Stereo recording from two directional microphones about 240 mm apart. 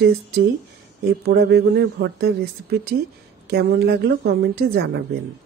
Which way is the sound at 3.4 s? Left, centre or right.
Right.